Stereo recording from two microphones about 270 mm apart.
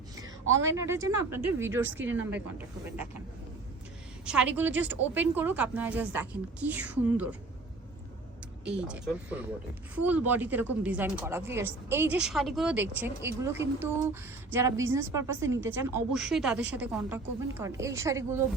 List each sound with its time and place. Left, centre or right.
0.4 s a woman's voice: right
0.8 s a woman's voice: centre
4.3 s a woman's voice: centre
8.6 s a woman's voice: centre